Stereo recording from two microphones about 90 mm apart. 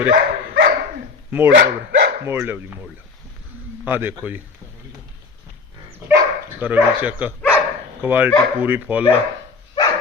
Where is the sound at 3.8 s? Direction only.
20° right (ahead or behind).